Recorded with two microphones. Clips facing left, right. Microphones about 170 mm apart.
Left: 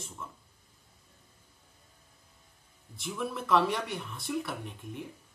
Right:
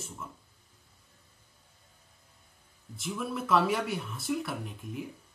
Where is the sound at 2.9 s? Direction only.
Centre (ahead or behind).